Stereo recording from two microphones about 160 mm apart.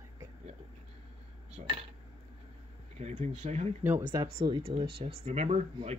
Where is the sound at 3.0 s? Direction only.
45° right (ahead or behind).